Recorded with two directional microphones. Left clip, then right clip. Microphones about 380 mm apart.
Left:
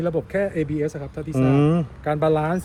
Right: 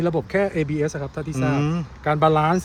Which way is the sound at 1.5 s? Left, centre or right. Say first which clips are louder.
Left 5 dB; centre.